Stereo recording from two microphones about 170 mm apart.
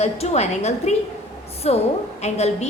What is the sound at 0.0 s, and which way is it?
A woman's voice, 40° left (ahead or behind).